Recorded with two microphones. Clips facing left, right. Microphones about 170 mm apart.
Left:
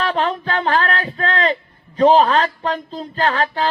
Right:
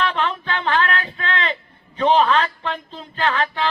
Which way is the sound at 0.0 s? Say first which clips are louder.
Left 3 dB; 40° left (ahead or behind).